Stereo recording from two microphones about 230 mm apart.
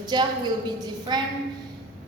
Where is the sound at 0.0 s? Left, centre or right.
Centre.